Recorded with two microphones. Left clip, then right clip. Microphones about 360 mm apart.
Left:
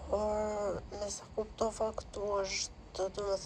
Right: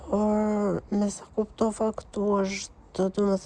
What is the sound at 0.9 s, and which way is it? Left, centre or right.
A woman's voice, right.